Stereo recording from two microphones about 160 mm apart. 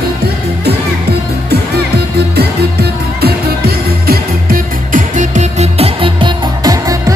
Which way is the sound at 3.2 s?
75° right (ahead or behind).